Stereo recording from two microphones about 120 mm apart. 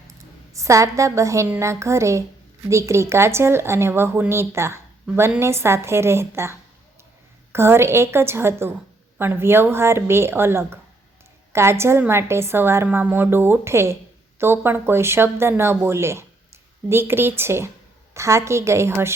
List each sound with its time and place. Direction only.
0.5 s a woman's voice: 25° right (ahead or behind)